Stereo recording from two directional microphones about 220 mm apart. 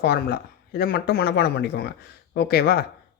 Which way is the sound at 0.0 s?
45° left (ahead or behind).